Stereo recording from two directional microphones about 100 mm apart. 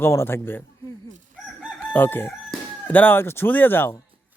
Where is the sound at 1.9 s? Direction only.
20° left (ahead or behind).